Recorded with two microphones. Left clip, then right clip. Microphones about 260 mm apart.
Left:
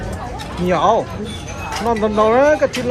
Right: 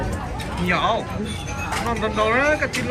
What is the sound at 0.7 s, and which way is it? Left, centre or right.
Speech, centre.